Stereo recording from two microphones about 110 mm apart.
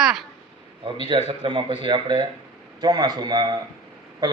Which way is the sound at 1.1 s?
50° right (ahead or behind).